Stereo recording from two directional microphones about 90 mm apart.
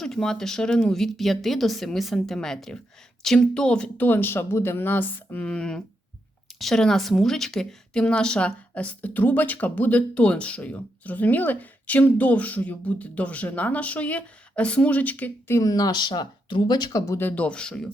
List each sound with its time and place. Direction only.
0.0 s a woman's voice: 5° left (ahead or behind)
4.0 s speech: 25° left (ahead or behind)
5.5 s a woman's voice: 10° left (ahead or behind)
15.5 s speech: 45° left (ahead or behind)
17.2 s a woman's voice: 20° left (ahead or behind)